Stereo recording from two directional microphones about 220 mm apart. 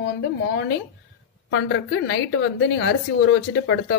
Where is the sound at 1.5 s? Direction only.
60° left (ahead or behind).